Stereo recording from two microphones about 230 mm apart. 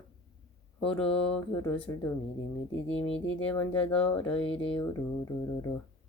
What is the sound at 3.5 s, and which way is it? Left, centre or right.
Speech, centre.